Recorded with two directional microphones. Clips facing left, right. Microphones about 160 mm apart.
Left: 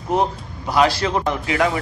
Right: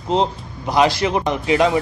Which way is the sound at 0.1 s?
20° right (ahead or behind).